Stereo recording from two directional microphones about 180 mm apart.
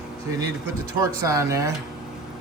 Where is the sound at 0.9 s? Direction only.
20° right (ahead or behind).